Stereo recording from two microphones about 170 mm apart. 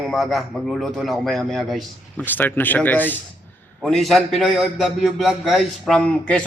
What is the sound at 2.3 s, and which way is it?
A man's voice, 10° left (ahead or behind).